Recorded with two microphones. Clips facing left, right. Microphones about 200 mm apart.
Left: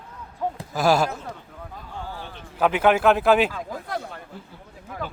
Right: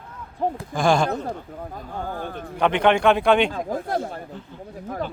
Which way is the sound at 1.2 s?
40° right (ahead or behind).